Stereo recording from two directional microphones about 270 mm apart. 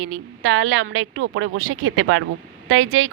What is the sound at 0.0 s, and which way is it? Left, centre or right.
Speech, right.